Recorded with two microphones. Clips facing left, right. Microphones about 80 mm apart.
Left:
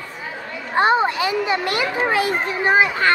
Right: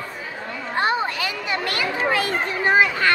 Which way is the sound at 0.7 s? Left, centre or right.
Left.